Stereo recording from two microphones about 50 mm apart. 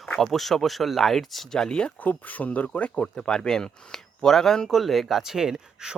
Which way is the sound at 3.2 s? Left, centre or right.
Centre.